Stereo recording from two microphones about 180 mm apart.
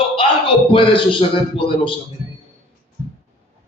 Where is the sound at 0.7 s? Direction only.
30° left (ahead or behind).